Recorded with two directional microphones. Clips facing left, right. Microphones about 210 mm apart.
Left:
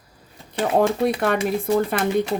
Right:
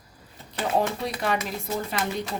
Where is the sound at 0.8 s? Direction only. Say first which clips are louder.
Left 8 dB; 55° left (ahead or behind).